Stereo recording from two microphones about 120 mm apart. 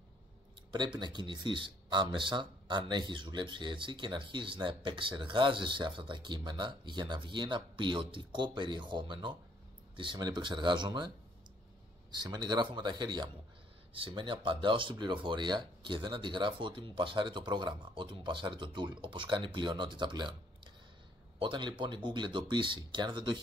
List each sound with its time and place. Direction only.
0.7 s speech: 40° right (ahead or behind)
12.1 s speech: 35° right (ahead or behind)